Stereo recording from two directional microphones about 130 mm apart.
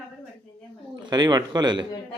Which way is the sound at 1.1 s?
30° right (ahead or behind).